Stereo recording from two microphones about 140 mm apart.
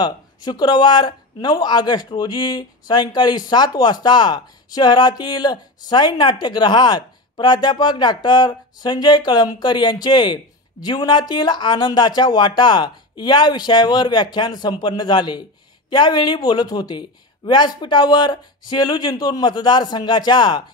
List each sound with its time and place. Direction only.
0.0 s speech: 30° left (ahead or behind)